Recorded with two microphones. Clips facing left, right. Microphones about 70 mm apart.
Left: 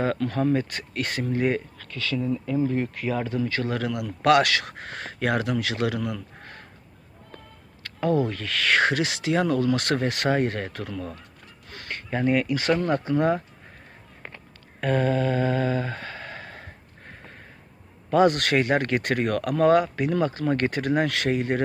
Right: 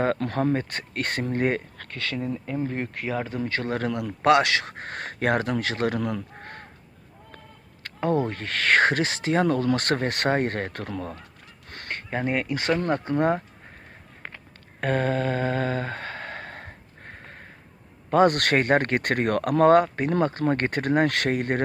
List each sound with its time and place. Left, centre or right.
0.0 s speech: right
0.5 s speech: right
3.3 s speech: right
4.8 s speech: right
6.4 s crow: right
7.9 s speech: right
10.9 s speech: right
11.7 s a sound: right
12.1 s speech: right
14.8 s a sound: right
18.1 s speech: right